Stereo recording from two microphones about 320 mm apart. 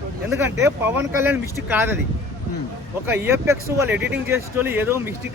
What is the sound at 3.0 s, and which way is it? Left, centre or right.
Speech, centre.